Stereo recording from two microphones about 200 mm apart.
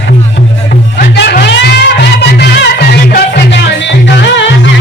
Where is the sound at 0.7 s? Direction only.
55° left (ahead or behind).